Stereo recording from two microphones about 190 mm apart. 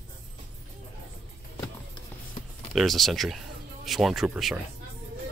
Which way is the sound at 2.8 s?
Centre (ahead or behind).